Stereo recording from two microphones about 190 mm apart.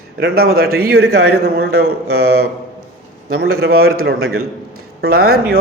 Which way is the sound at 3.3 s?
55° right (ahead or behind).